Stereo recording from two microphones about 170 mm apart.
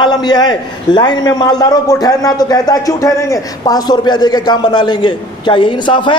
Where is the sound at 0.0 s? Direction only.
25° left (ahead or behind).